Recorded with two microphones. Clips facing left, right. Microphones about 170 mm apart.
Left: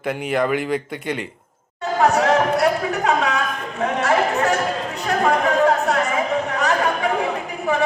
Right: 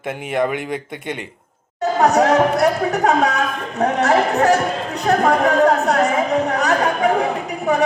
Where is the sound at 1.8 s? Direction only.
45° right (ahead or behind).